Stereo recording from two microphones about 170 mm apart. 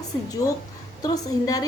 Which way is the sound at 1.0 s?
20° left (ahead or behind).